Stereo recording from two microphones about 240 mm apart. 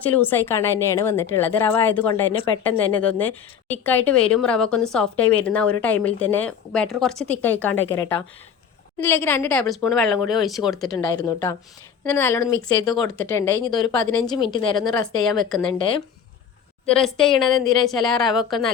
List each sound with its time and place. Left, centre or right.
0.0 s a woman's voice: centre
10.9 s a woman's voice: centre
12.8 s a woman's voice: centre
14.8 s a woman's voice: centre
16.9 s a woman's voice: centre